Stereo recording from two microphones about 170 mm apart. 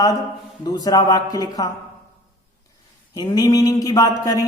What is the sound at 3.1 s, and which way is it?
A woman's voice, 25° left (ahead or behind).